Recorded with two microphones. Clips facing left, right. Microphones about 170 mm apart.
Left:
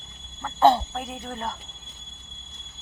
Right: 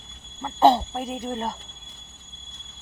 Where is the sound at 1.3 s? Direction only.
25° right (ahead or behind).